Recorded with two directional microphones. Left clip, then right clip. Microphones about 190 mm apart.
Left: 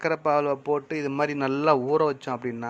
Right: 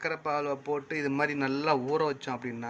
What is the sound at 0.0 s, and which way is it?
A man's voice, 25° left (ahead or behind).